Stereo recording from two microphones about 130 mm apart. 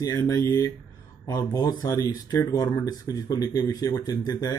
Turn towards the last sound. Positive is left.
turn(degrees=30)  # may be behind; listen again after turning